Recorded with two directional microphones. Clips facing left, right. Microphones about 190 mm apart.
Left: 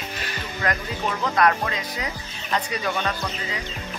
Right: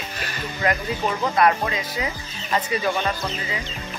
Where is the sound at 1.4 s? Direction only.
5° right (ahead or behind).